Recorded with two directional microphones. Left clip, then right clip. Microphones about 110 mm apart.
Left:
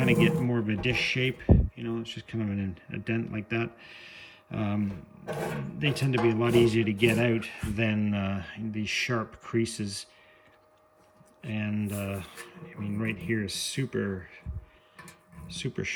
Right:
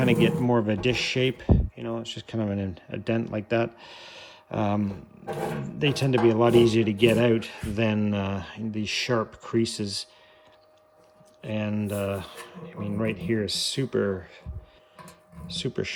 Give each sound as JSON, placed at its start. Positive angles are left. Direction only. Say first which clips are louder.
{"t": 0.0, "sound": "speech", "louder": "right 2 dB", "side_deg": -35}
{"t": 11.4, "sound": "speech", "louder": "right 4 dB", "side_deg": -25}
{"t": 15.4, "sound": "speech", "louder": "right 4 dB", "side_deg": -25}